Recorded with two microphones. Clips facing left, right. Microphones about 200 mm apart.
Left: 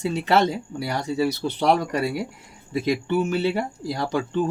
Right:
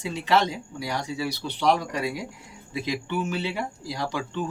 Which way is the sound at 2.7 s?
50° left (ahead or behind).